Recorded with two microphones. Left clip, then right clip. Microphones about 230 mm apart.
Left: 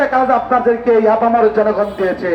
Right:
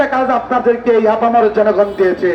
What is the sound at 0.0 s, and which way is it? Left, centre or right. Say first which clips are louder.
A man's voice: left 1 dB; right.